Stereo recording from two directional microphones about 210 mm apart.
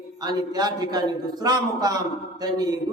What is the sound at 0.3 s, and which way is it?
A man's voice, 20° right (ahead or behind).